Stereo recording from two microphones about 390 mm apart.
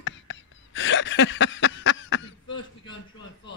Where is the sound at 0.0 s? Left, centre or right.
Left.